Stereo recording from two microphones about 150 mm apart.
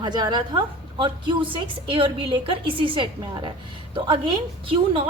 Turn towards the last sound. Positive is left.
turn(degrees=-35)  # may be behind; listen again after turning